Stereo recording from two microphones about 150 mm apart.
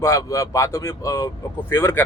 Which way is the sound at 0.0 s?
20° left (ahead or behind).